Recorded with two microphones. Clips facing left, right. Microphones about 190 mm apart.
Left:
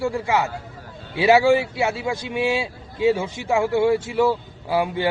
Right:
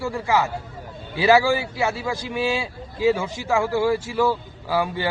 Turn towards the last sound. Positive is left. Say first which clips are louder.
# left 2 dB
turn(degrees=20)  # may be behind; listen again after turning